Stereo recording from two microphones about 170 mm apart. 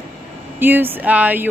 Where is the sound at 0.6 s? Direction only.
10° right (ahead or behind).